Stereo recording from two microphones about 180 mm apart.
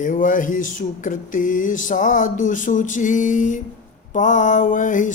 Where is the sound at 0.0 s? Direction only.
45° left (ahead or behind).